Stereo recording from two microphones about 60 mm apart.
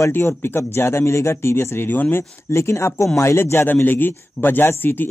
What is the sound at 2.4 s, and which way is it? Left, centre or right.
Speech, left.